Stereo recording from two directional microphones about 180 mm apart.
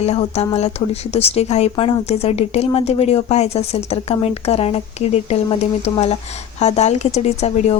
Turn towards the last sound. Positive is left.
turn(degrees=35)  # may be behind; listen again after turning